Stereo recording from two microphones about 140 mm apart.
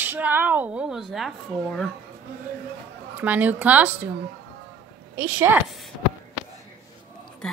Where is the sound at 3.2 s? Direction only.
10° right (ahead or behind).